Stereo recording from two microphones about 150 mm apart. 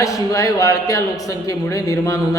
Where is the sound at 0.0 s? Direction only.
20° left (ahead or behind).